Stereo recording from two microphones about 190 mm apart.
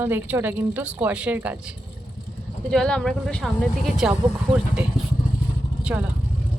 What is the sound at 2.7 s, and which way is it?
Speech, 5° left (ahead or behind).